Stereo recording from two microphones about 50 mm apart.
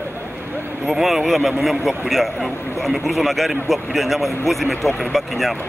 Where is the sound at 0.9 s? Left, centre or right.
Centre.